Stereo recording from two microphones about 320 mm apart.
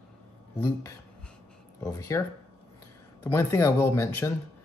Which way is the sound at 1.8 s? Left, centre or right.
Centre.